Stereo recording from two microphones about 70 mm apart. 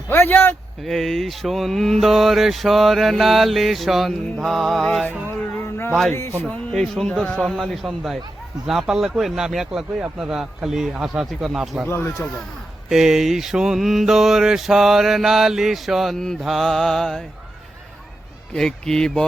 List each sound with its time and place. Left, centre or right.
0.1 s speech: left
0.9 s mantra: centre
5.5 s a sound: left
6.4 s speech: centre
6.7 s speech: centre
7.4 s mantra: centre
10.2 s speech: centre
10.9 s mantra: centre
11.9 s speech: left
12.9 s mantra: centre
18.5 s speech: centre